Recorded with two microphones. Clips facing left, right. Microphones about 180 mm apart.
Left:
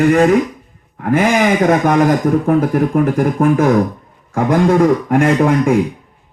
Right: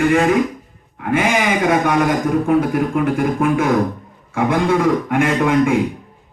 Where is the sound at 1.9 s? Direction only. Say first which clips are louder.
Left 4 dB; 45° left (ahead or behind).